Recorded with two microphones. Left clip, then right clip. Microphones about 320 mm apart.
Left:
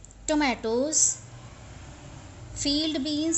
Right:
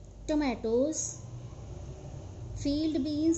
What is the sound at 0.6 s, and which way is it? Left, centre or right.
Child singing, left.